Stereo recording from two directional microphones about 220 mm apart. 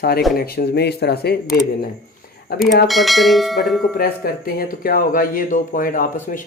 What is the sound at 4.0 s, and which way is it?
Speech, 45° left (ahead or behind).